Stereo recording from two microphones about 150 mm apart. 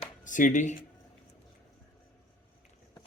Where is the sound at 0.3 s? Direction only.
55° left (ahead or behind).